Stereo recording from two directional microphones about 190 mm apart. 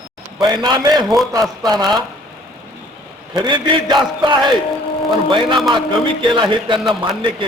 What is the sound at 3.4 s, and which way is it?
Speech, 25° right (ahead or behind).